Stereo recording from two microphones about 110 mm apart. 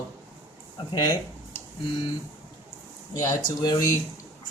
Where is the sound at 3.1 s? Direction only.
30° left (ahead or behind).